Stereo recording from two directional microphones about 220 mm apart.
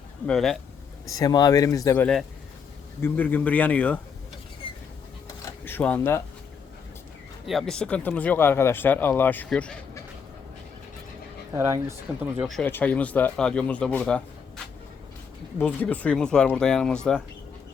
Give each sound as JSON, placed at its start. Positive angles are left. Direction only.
{"t": 0.3, "sound": "speech", "side_deg": 0}
{"t": 1.0, "sound": "speech", "side_deg": 15}
{"t": 5.6, "sound": "speech", "side_deg": 10}
{"t": 7.4, "sound": "speech", "side_deg": 0}
{"t": 11.5, "sound": "speech", "side_deg": -10}